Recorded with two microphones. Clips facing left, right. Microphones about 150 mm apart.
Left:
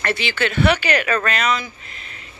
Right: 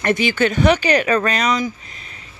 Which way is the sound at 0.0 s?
15° right (ahead or behind).